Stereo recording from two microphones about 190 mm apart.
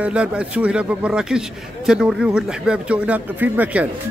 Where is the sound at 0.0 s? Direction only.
5° right (ahead or behind).